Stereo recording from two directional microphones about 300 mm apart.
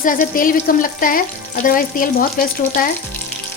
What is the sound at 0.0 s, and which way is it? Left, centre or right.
Frying, left.